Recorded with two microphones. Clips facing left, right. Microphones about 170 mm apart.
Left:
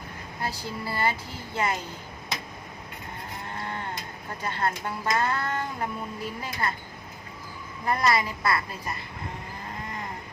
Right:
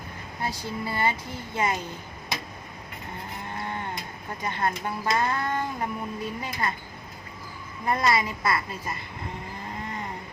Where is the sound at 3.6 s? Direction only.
15° right (ahead or behind).